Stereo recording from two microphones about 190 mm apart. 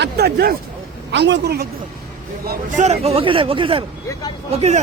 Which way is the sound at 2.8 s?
35° right (ahead or behind).